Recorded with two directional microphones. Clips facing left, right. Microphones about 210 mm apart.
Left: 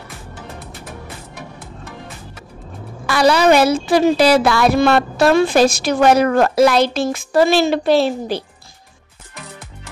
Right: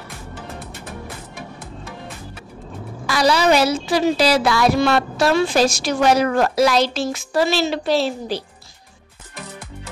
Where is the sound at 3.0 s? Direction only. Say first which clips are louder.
Left 4 dB; 60° left (ahead or behind).